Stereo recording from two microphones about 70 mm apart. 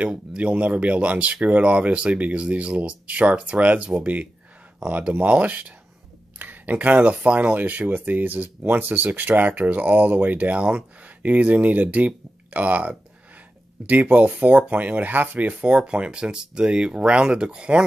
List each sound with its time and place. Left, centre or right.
0.0 s speech: centre